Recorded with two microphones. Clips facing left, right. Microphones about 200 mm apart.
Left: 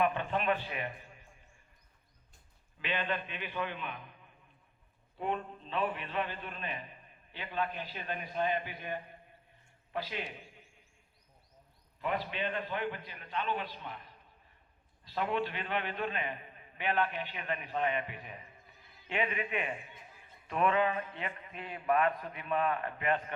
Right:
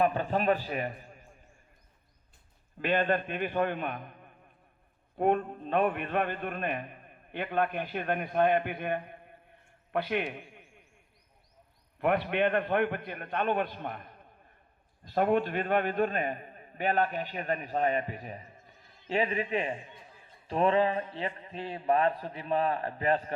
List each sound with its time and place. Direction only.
0.0 s a man's voice: 40° right (ahead or behind)
2.7 s a man's voice: 45° right (ahead or behind)
9.9 s a sound: 60° right (ahead or behind)
11.9 s a man's voice: 60° right (ahead or behind); by 23.3 s 35° right (ahead or behind)